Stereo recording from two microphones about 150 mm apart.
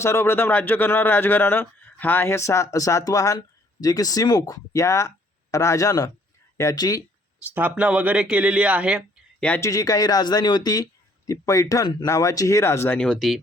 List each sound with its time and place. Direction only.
0.0 s a man's voice: 15° left (ahead or behind)
7.5 s speech: 10° right (ahead or behind)
9.6 s a man's voice: 20° left (ahead or behind)
13.0 s speech: 5° left (ahead or behind)